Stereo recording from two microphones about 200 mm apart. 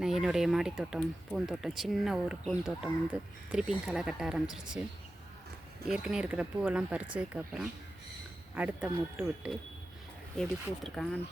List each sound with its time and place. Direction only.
0.0 s speech: centre (ahead or behind)
5.9 s speech: 5° right (ahead or behind)
10.8 s speech: centre (ahead or behind)